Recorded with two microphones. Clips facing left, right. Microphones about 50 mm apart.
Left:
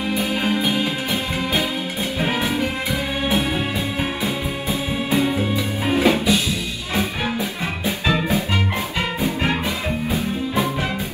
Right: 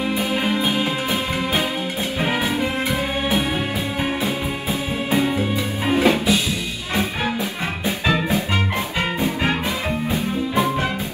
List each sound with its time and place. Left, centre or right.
0.2 s music: right
2.2 s music: right
5.9 s music: centre
10.5 s music: right